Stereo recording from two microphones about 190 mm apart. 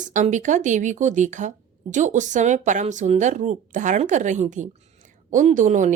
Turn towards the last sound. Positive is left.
turn(degrees=-40)  # may be behind; listen again after turning